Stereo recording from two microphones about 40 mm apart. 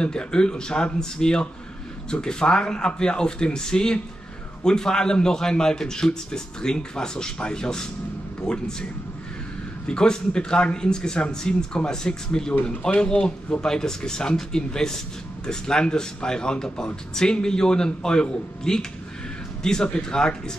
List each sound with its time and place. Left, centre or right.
0.0 s speech: left
9.8 s speech: left